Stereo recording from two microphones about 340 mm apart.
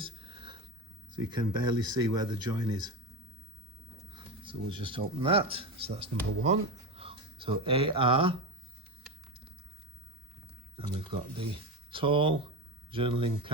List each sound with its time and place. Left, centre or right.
0.0 s whispering: centre
1.1 s speech: centre
4.1 s speech: centre
10.8 s speech: centre